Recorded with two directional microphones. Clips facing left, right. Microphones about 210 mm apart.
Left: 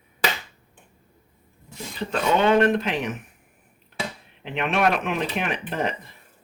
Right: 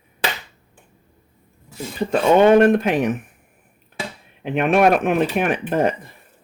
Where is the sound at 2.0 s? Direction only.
50° right (ahead or behind).